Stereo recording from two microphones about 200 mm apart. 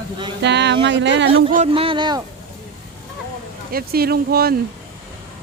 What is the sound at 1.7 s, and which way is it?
Speech, 25° right (ahead or behind).